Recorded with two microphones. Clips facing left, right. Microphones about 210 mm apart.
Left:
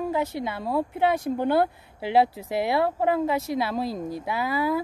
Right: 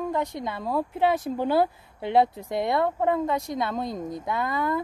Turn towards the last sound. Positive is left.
turn(degrees=5)  # may be behind; listen again after turning